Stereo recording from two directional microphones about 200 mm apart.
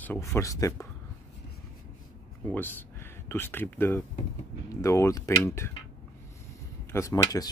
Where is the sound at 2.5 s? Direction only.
10° left (ahead or behind).